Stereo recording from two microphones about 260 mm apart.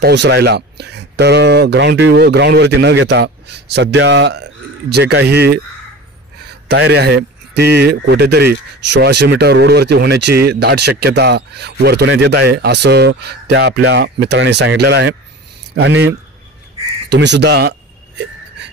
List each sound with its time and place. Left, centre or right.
0.0 s speech: right
6.7 s speech: right
17.1 s speech: right